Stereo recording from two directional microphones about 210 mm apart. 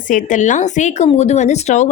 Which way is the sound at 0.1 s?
40° left (ahead or behind).